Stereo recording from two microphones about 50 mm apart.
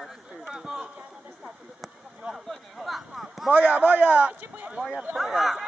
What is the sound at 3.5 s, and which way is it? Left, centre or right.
Speech, right.